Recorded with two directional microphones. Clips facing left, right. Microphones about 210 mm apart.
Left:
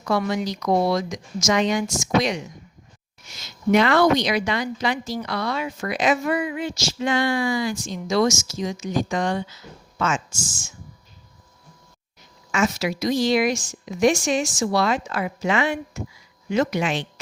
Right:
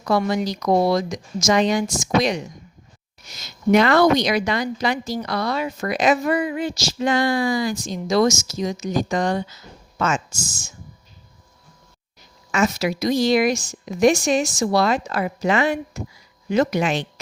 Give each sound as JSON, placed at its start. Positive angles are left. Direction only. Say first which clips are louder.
{"t": 0.0, "sound": "a woman's voice", "louder": "right 2 dB", "side_deg": -35}
{"t": 12.5, "sound": "a woman's voice", "louder": "right 2 dB", "side_deg": -40}